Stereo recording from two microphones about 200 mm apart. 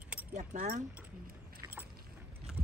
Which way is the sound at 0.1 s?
5° right (ahead or behind).